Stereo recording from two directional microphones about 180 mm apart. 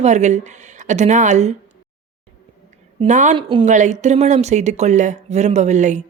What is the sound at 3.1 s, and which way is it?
Speech, 45° right (ahead or behind).